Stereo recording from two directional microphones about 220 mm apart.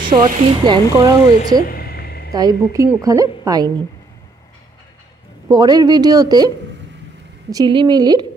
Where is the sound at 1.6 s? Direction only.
45° left (ahead or behind).